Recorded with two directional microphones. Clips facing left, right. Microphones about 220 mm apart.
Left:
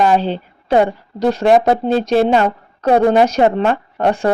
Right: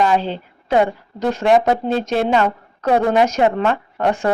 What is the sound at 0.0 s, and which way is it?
A woman's voice, 35° left (ahead or behind).